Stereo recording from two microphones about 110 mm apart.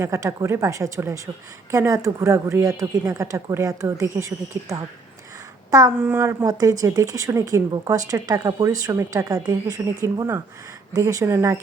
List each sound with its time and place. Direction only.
0.0 s speech: 25° right (ahead or behind)
6.0 s speech: 20° right (ahead or behind)